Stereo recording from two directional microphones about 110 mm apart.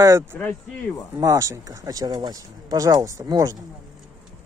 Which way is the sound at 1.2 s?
30° right (ahead or behind).